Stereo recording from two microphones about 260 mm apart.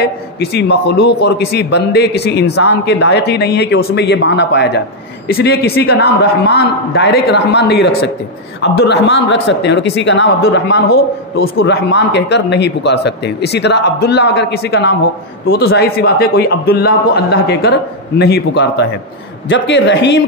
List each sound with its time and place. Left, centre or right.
0.0 s a man's voice: left